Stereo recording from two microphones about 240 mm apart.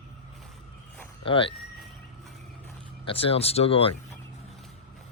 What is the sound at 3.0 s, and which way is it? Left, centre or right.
Speech, left.